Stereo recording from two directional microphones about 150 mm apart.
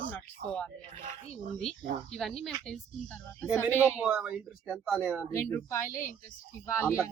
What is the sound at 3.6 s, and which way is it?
Speech, 15° right (ahead or behind).